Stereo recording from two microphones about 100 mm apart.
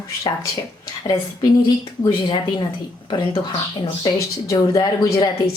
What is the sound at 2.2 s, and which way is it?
Speech, 55° left (ahead or behind).